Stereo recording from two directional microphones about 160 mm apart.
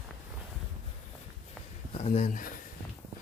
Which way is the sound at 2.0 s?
45° left (ahead or behind).